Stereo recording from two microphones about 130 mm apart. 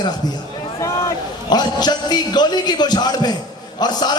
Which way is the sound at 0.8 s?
30° left (ahead or behind).